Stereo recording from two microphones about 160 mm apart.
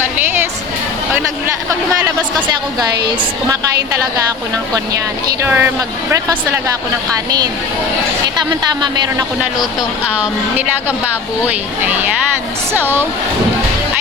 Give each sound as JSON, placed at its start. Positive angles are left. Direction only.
{"t": 5.4, "sound": "a woman's voice", "side_deg": -15}
{"t": 8.8, "sound": "a man's voice", "side_deg": -25}
{"t": 11.4, "sound": "a woman's voice", "side_deg": -10}